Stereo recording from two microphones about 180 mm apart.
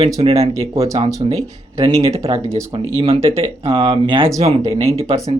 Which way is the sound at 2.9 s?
30° right (ahead or behind).